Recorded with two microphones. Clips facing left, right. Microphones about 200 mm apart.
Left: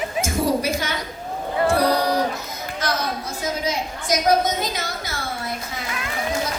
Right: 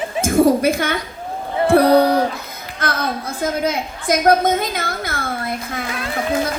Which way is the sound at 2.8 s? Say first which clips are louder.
Right 2 dB; 55° right (ahead or behind).